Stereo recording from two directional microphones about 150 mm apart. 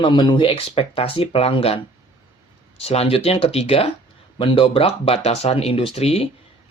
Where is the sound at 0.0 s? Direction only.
30° left (ahead or behind).